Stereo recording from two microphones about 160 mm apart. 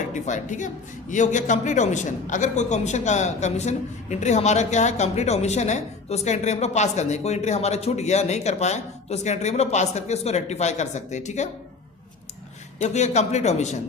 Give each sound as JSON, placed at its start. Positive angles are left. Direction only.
{"t": 0.0, "sound": "a woman's voice", "side_deg": 50}
{"t": 12.8, "sound": "a man's voice", "side_deg": 45}